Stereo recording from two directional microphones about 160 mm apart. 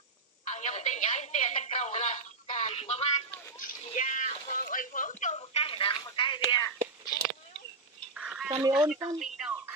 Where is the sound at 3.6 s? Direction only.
55° left (ahead or behind); by 6.7 s 25° left (ahead or behind).